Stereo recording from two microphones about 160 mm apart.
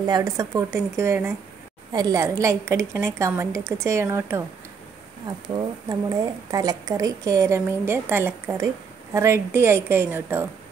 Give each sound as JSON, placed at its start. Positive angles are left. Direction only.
{"t": 0.0, "sound": "a woman's voice", "side_deg": -20}